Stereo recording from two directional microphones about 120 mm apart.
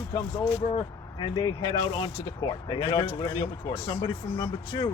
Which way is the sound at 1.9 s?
30° left (ahead or behind).